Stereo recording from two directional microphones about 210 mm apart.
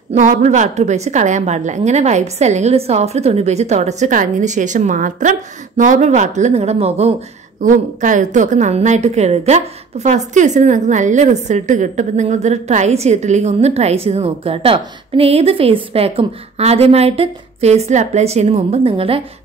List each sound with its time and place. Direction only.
0.1 s a woman's voice: 35° right (ahead or behind)